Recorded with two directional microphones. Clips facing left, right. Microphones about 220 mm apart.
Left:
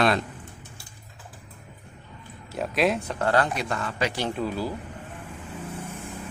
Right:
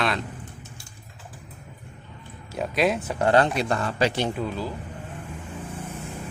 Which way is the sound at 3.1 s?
20° right (ahead or behind).